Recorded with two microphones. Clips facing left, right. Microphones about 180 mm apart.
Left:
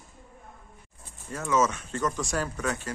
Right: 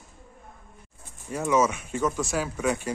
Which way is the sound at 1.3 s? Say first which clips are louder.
Right 3 dB; 15° right (ahead or behind).